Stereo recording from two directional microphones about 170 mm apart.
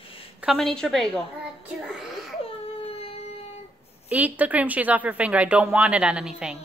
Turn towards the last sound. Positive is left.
turn(degrees=-5)  # may be behind; listen again after turning